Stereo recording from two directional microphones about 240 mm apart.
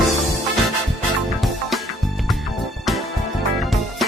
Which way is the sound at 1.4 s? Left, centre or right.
Centre.